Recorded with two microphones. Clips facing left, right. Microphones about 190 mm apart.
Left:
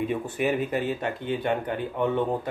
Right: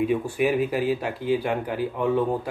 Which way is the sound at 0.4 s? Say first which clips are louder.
Right 1 dB; 5° right (ahead or behind).